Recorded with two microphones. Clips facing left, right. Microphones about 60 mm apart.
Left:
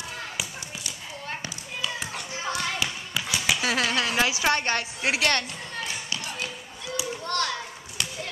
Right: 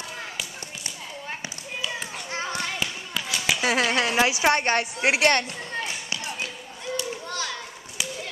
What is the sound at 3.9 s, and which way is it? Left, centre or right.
Speech, right.